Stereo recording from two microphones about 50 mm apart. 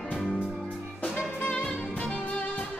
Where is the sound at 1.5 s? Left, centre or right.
Left.